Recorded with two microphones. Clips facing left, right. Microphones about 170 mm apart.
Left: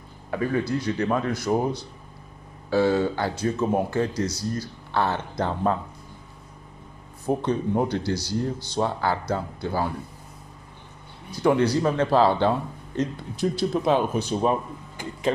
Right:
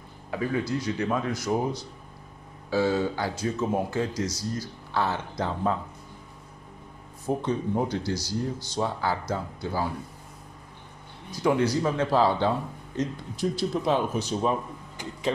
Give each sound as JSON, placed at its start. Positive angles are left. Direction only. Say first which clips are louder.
{"t": 0.3, "sound": "speech", "louder": "left 3 dB", "side_deg": 55}
{"t": 7.2, "sound": "speech", "louder": "left 3 dB", "side_deg": 65}
{"t": 11.4, "sound": "speech", "louder": "left 3 dB", "side_deg": 65}